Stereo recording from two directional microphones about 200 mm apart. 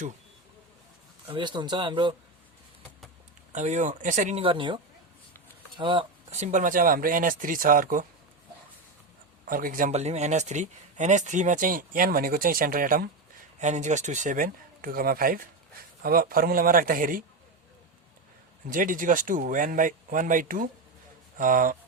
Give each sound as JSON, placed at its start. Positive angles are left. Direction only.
{"t": 1.3, "sound": "speech", "side_deg": -20}
{"t": 3.5, "sound": "speech", "side_deg": -35}
{"t": 9.5, "sound": "speech", "side_deg": -45}
{"t": 18.7, "sound": "speech", "side_deg": -40}